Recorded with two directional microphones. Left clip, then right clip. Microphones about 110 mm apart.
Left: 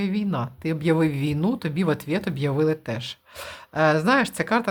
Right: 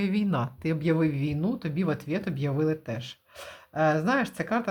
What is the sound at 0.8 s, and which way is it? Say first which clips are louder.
Speech: left 5 dB; 25° left (ahead or behind).